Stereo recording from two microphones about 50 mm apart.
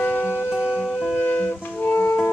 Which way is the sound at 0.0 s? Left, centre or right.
Left.